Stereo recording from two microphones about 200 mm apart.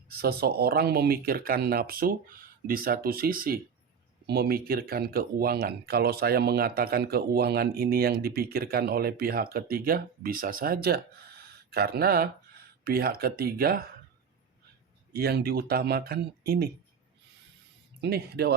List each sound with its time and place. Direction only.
0.1 s speech: 50° right (ahead or behind)
15.1 s speech: 50° right (ahead or behind)
18.0 s speech: 55° right (ahead or behind)